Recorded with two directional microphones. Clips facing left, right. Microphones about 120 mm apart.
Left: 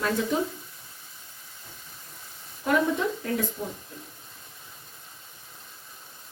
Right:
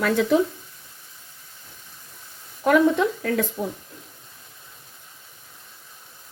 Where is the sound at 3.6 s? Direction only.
75° right (ahead or behind).